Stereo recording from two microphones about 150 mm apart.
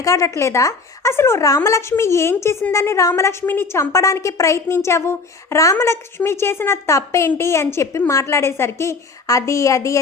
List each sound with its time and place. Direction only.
0.0 s a woman's voice: 20° left (ahead or behind)